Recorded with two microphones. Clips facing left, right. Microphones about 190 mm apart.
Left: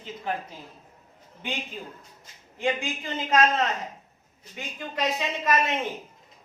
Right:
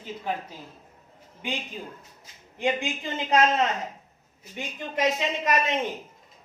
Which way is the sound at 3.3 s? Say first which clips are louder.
Right 1 dB; 20° right (ahead or behind).